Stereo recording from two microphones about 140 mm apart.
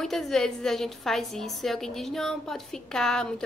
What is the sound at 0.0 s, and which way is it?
A woman's voice, centre (ahead or behind).